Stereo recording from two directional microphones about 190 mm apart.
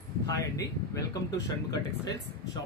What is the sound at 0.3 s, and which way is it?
Speech, 15° left (ahead or behind).